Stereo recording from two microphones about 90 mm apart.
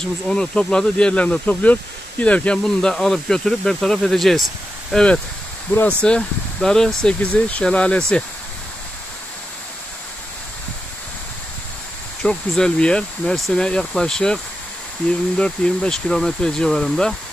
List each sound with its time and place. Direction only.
0.3 s speech: 10° left (ahead or behind)
6.0 s speech: 10° left (ahead or behind)
12.2 s speech: 10° left (ahead or behind)